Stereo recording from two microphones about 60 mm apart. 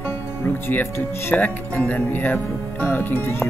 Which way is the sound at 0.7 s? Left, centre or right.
Left.